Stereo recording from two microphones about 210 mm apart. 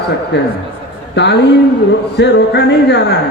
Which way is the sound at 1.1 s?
55° left (ahead or behind).